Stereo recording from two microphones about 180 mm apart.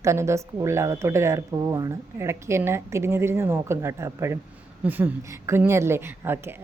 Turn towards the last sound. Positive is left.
turn(degrees=-10)  # may be behind; listen again after turning